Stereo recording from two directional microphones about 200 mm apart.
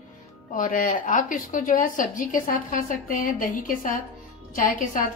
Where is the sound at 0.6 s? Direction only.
45° left (ahead or behind).